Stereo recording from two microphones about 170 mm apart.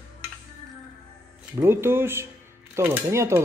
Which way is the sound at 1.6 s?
15° right (ahead or behind).